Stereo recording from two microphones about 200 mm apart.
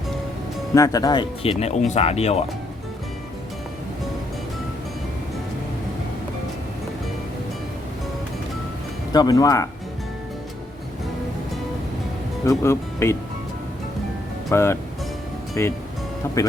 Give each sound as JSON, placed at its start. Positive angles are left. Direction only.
{"t": 0.7, "sound": "speech", "side_deg": 15}
{"t": 9.1, "sound": "speech", "side_deg": 20}
{"t": 12.5, "sound": "speech", "side_deg": 15}
{"t": 14.5, "sound": "speech", "side_deg": 10}